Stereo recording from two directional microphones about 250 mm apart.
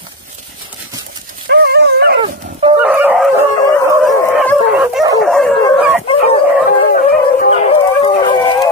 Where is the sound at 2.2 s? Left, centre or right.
Right.